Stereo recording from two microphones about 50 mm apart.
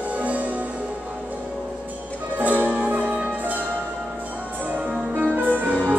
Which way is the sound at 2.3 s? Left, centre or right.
Right.